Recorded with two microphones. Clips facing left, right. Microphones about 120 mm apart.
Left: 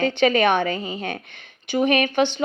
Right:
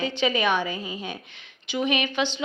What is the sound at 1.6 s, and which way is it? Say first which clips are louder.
Speech: left 6 dB; 50° left (ahead or behind).